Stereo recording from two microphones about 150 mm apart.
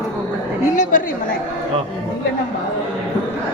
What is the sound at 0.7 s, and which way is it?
Speech, 60° left (ahead or behind).